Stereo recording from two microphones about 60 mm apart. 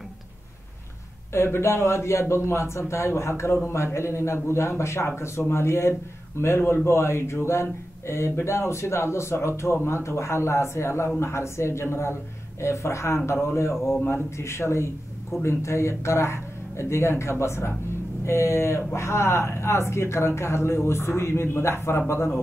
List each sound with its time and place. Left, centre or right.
1.3 s speech: left